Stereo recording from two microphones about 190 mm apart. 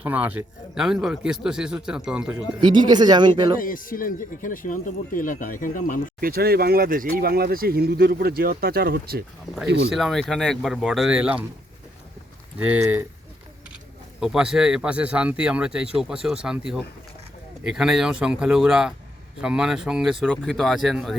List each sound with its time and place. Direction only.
0.0 s speech: 10° right (ahead or behind)
2.6 s speech: 25° right (ahead or behind)
3.6 s speech: 45° left (ahead or behind)
6.1 s speech: 50° right (ahead or behind)
9.9 s speech: centre (ahead or behind)
12.5 s speech: 10° right (ahead or behind)
14.2 s speech: 5° right (ahead or behind)